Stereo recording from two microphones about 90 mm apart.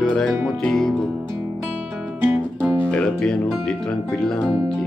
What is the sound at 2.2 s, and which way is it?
Music, 20° right (ahead or behind).